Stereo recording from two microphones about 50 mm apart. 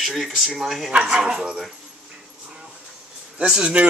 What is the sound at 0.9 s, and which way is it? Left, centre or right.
Speech, right.